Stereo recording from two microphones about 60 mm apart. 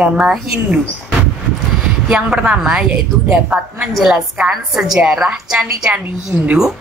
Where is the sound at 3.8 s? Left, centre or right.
Centre.